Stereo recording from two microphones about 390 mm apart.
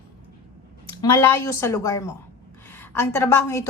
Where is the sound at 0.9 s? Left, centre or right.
Centre.